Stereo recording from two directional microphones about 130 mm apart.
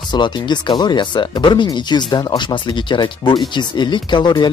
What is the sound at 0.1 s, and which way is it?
Speech, 35° left (ahead or behind).